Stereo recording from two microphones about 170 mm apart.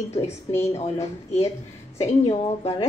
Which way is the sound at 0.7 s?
40° left (ahead or behind).